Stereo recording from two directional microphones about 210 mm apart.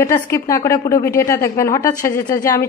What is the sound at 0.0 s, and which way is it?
A woman's voice, 15° left (ahead or behind).